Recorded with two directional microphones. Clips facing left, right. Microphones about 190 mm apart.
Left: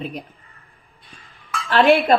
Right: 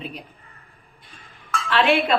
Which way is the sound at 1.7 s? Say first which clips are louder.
Left 5 dB; 40° left (ahead or behind).